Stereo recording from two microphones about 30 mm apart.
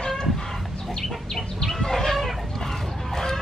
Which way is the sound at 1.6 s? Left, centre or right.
Centre.